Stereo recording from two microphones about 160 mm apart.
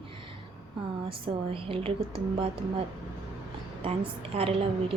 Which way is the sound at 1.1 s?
35° right (ahead or behind).